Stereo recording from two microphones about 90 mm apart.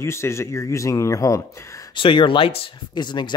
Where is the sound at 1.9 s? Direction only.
70° left (ahead or behind); by 2.7 s 90° left.